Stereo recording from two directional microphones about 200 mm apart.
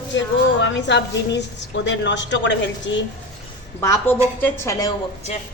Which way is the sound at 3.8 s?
10° left (ahead or behind).